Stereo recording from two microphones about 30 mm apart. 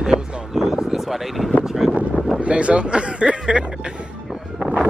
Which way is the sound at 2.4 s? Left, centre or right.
Right.